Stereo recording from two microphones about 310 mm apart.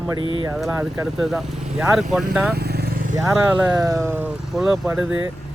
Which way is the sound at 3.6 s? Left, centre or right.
Centre.